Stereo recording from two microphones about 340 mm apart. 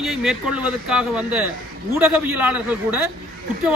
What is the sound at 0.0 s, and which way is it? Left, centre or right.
Speech, centre.